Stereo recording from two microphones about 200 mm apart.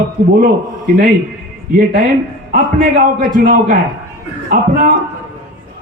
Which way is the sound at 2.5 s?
45° right (ahead or behind).